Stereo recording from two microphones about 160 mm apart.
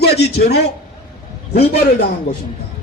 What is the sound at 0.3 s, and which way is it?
A man's voice, 90° left.